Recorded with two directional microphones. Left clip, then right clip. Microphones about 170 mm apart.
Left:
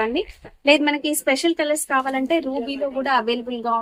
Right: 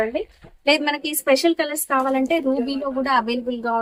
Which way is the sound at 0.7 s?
25° left (ahead or behind).